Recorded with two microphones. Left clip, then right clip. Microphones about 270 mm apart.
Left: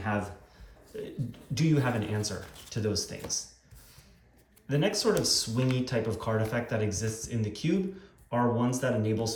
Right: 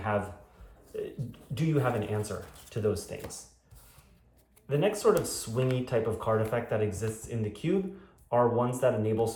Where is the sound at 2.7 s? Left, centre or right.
Centre.